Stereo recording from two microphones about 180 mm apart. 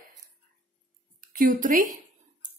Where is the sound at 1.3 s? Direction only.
50° right (ahead or behind).